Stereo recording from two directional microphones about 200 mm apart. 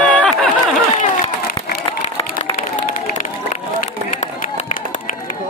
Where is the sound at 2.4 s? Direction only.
35° left (ahead or behind).